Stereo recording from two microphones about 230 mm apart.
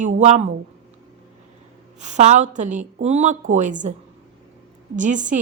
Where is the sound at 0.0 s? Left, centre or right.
Right.